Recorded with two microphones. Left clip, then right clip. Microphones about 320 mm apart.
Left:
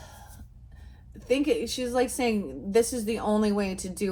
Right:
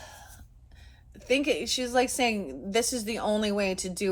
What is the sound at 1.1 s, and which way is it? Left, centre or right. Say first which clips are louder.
A woman's voice: left 1 dB; right.